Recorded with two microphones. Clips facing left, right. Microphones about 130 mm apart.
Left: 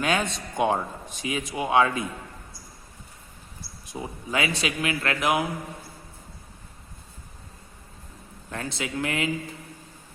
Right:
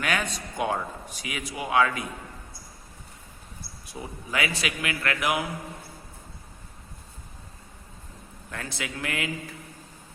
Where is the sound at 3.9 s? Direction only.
20° left (ahead or behind).